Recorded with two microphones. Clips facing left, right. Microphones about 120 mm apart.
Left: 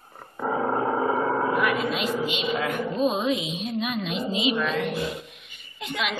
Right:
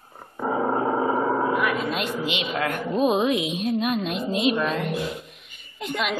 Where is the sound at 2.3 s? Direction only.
Centre (ahead or behind).